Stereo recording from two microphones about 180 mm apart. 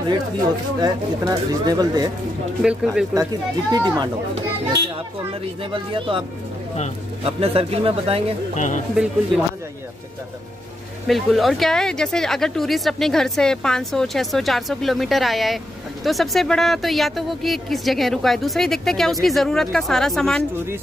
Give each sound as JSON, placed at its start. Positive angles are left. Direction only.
{"t": 0.7, "sound": "speech", "side_deg": -20}
{"t": 2.6, "sound": "speech", "side_deg": -5}
{"t": 3.7, "sound": "speech", "side_deg": -25}
{"t": 5.6, "sound": "speech", "side_deg": -30}
{"t": 7.2, "sound": "speech", "side_deg": -35}
{"t": 8.5, "sound": "speech", "side_deg": 45}
{"t": 8.9, "sound": "speech", "side_deg": -5}
{"t": 11.1, "sound": "speech", "side_deg": 0}